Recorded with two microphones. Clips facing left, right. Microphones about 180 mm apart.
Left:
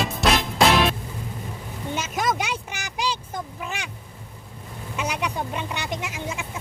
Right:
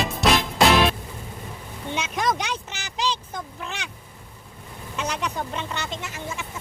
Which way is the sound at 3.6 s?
10° left (ahead or behind).